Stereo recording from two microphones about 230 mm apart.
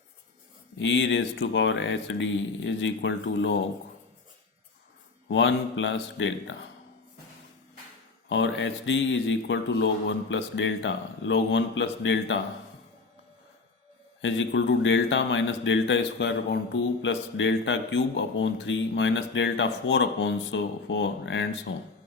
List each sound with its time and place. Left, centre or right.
0.8 s speech: left
5.3 s speech: left
8.3 s speech: left
14.2 s speech: left